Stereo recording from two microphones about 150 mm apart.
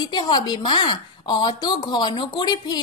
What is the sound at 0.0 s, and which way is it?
A woman's voice, 30° left (ahead or behind).